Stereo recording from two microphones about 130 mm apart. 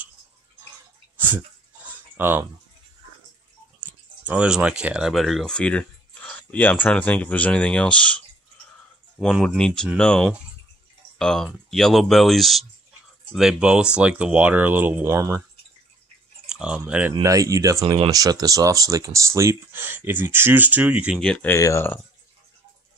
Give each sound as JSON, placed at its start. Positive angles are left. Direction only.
{"t": 2.1, "sound": "speech", "side_deg": -15}
{"t": 4.3, "sound": "speech", "side_deg": -10}
{"t": 9.2, "sound": "speech", "side_deg": 0}
{"t": 16.4, "sound": "speech", "side_deg": -5}
{"t": 17.2, "sound": "speech", "side_deg": -25}
{"t": 21.2, "sound": "speech", "side_deg": 5}
{"t": 21.5, "sound": "speech", "side_deg": 20}